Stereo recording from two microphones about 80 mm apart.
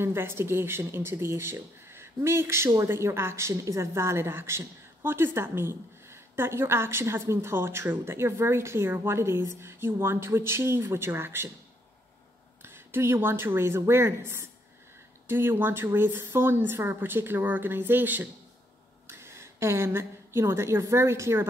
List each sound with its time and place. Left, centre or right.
0.0 s speech: right
12.6 s a woman's voice: right